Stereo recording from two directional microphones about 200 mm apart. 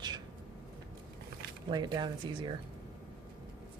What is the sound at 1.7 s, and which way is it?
Speech, 20° right (ahead or behind).